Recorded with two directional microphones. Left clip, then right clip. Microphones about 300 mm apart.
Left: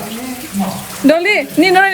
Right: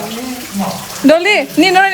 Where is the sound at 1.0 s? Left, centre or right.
Centre.